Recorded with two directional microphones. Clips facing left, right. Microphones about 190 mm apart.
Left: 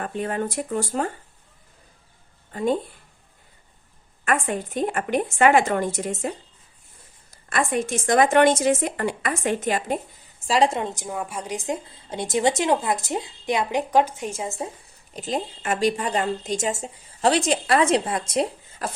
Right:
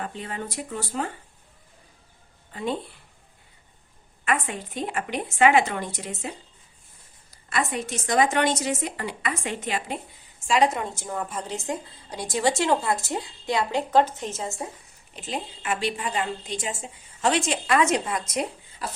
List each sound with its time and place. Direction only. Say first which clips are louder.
0.0 s speech: left 7 dB; 50° left (ahead or behind)
2.5 s speech: left 6 dB; 45° left (ahead or behind)
4.3 s speech: left 3 dB; 50° left (ahead or behind)
7.5 s speech: left 4 dB; 50° left (ahead or behind)
10.4 s a woman's voice: left 2 dB; 30° left (ahead or behind)
15.1 s a woman's voice: left 5 dB; 40° left (ahead or behind)
18.8 s speech: left 4 dB; 50° left (ahead or behind)